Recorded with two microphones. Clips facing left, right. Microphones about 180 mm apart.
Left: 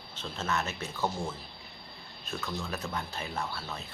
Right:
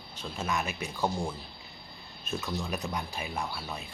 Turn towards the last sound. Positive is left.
turn(degrees=-10)  # may be behind; listen again after turning